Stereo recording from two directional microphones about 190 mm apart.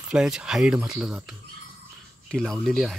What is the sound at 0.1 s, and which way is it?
Speech, 5° right (ahead or behind).